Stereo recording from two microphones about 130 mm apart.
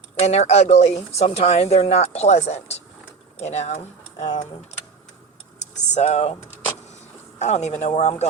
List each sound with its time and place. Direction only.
0.2 s speech: 55° left (ahead or behind)
5.5 s vehicle: 60° left (ahead or behind)
7.3 s speech: 60° left (ahead or behind)